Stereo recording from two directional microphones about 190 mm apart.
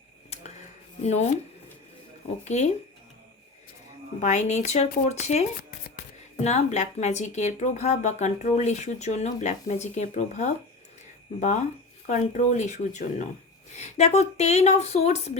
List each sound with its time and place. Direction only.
0.3 s a sound: 35° left (ahead or behind)
1.0 s a woman's voice: 35° left (ahead or behind)
2.4 s a woman's voice: 35° left (ahead or behind)
4.2 s a woman's voice: 40° left (ahead or behind)